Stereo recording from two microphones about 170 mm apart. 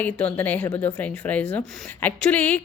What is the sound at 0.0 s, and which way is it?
A woman's voice, 10° left (ahead or behind).